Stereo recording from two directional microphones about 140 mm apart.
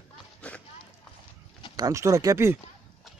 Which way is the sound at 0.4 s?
10° left (ahead or behind).